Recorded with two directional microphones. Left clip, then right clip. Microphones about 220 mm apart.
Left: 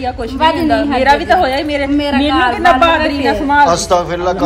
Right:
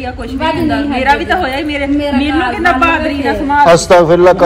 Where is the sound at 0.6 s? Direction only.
50° left (ahead or behind).